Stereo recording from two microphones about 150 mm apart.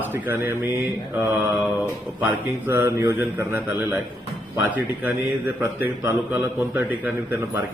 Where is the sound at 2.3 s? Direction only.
15° right (ahead or behind).